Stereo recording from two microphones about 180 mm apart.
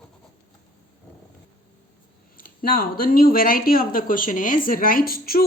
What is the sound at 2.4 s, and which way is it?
Speech, 55° left (ahead or behind).